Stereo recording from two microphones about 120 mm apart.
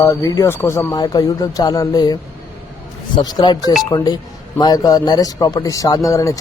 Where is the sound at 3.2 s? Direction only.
35° left (ahead or behind).